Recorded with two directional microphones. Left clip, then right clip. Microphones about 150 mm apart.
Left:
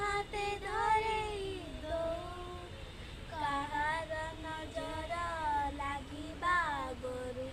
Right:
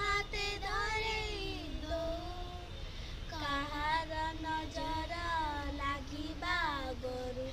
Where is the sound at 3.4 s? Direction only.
5° left (ahead or behind).